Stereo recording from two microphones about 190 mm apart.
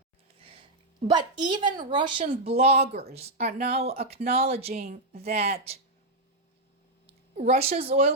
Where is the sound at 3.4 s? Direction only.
55° right (ahead or behind).